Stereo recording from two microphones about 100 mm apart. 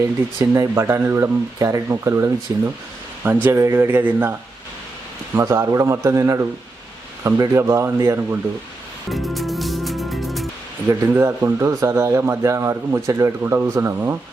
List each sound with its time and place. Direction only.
0.0 s a man's voice: 30° right (ahead or behind)
7.5 s speech: 30° right (ahead or behind)
9.0 s music: centre (ahead or behind)
10.8 s speech: 30° right (ahead or behind)